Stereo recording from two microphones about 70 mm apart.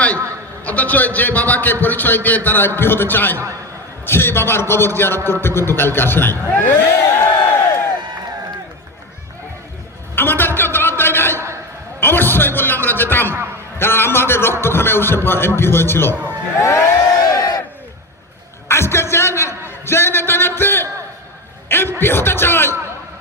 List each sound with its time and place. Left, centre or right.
0.6 s a man's voice: left
10.2 s a sound: left
13.7 s a man's voice: left
16.6 s crowd: left
17.0 s crowd: left
18.7 s a sound: left
22.0 s speech: left